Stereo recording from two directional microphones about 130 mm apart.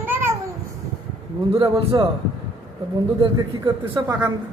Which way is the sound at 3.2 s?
35° right (ahead or behind).